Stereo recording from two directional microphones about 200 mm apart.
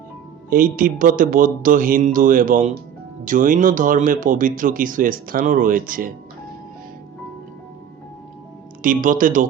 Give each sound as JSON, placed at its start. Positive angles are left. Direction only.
{"t": 0.5, "sound": "speech", "side_deg": -45}
{"t": 8.8, "sound": "speech", "side_deg": -45}